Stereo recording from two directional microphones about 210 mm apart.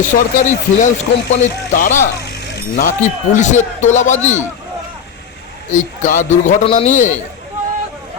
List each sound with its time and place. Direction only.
0.1 s speech: 35° left (ahead or behind)
2.2 s speech: 50° left (ahead or behind); by 4.4 s 35° left (ahead or behind)
5.7 s speech: 35° left (ahead or behind)